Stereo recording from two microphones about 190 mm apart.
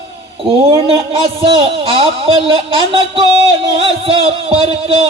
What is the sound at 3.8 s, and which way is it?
Music, 30° right (ahead or behind).